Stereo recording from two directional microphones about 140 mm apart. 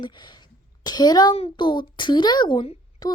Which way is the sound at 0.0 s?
30° left (ahead or behind).